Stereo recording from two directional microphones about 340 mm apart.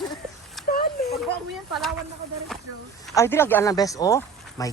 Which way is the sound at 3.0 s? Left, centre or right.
Centre.